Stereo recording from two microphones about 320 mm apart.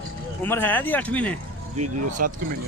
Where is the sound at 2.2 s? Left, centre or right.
Right.